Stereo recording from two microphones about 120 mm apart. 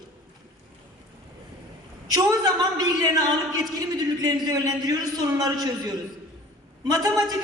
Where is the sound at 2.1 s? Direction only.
30° right (ahead or behind).